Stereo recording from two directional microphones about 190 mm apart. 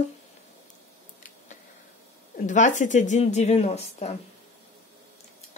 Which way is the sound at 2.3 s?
40° left (ahead or behind).